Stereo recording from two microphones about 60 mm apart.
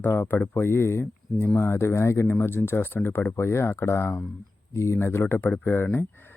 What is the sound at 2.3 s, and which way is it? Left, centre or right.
Speech, left.